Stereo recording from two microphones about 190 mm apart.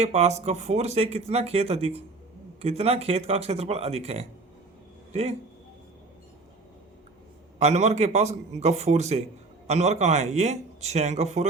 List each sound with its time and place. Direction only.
0.0 s speech: 35° right (ahead or behind)
7.6 s speech: 35° right (ahead or behind)